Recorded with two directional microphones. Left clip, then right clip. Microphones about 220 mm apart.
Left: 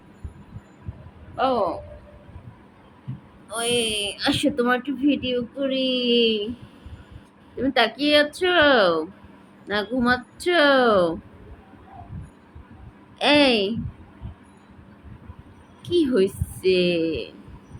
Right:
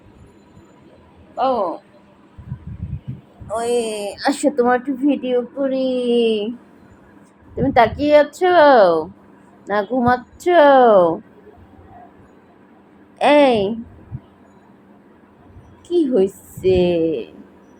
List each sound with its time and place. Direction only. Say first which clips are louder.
1.4 s speech: right 4 dB; 5° left (ahead or behind)
3.6 s speech: right 3 dB; 10° left (ahead or behind)
3.8 s speech: right 1 dB; 20° left (ahead or behind)
4.1 s speech: right 4 dB; centre (ahead or behind)
7.5 s speech: right 6 dB; centre (ahead or behind)
13.1 s speech: right 5 dB; centre (ahead or behind)
15.9 s speech: right 4 dB; 10° left (ahead or behind)